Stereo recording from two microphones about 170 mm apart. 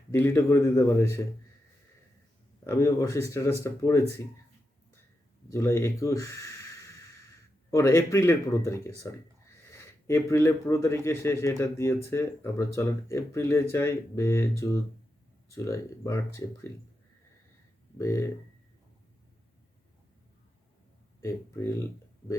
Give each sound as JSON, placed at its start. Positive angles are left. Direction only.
{"t": 0.1, "sound": "speech", "side_deg": 15}
{"t": 2.6, "sound": "speech", "side_deg": 20}
{"t": 5.5, "sound": "speech", "side_deg": 20}
{"t": 17.9, "sound": "speech", "side_deg": 15}
{"t": 21.2, "sound": "speech", "side_deg": 15}